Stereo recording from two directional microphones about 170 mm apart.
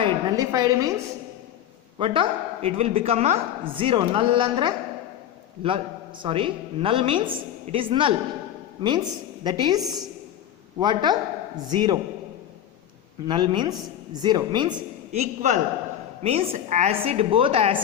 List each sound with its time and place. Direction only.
0.0 s a woman's voice: 20° right (ahead or behind)
2.0 s a woman's voice: 30° right (ahead or behind)
13.2 s a woman's voice: 25° right (ahead or behind)
15.1 s a man's voice: 45° right (ahead or behind)